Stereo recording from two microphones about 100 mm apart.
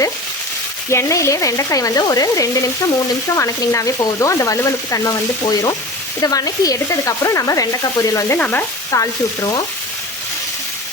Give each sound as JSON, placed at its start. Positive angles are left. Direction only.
{"t": 0.9, "sound": "frying", "side_deg": 30}
{"t": 8.4, "sound": "stir", "side_deg": 15}
{"t": 8.9, "sound": "frying", "side_deg": 35}